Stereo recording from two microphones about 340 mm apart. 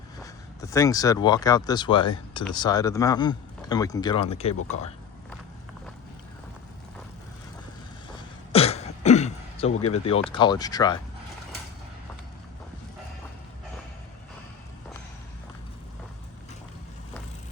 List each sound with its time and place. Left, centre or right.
0.2 s speech: centre
8.5 s throat clearing: centre
10.2 s speech: centre